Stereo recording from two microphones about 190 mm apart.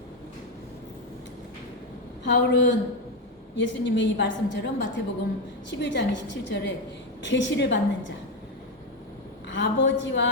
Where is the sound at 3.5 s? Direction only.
70° left (ahead or behind).